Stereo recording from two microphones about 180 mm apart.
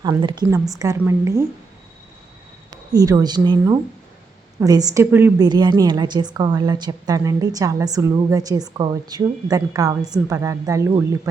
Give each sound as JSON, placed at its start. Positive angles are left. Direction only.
{"t": 0.0, "sound": "a woman's voice", "side_deg": -25}
{"t": 2.6, "sound": "a woman's voice", "side_deg": -20}